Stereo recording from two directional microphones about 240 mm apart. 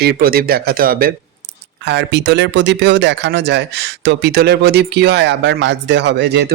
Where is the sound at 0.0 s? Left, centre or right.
Right.